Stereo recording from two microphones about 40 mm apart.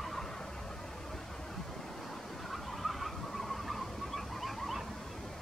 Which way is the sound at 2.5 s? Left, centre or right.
Centre.